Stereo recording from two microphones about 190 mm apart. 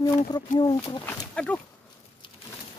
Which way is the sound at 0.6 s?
25° left (ahead or behind).